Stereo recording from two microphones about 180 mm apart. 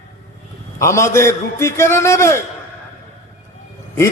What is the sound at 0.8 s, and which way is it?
A man's voice, 15° left (ahead or behind).